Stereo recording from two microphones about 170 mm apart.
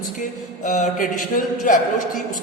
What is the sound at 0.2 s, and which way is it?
A woman's voice, 50° left (ahead or behind).